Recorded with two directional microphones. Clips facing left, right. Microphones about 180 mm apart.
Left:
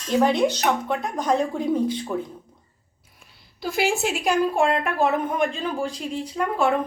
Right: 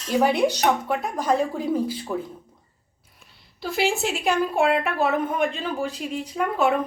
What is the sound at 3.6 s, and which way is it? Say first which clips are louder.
A woman's voice: left 1 dB; centre (ahead or behind).